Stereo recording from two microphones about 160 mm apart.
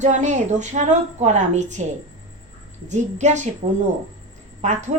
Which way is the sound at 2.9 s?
45° right (ahead or behind).